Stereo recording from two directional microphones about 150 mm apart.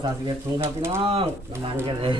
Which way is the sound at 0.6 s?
15° right (ahead or behind).